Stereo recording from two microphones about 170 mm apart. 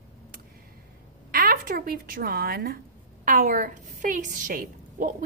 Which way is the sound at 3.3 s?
50° right (ahead or behind).